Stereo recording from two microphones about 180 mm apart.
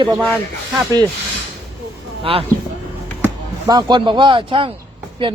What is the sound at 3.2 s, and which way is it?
A man's voice, 20° right (ahead or behind).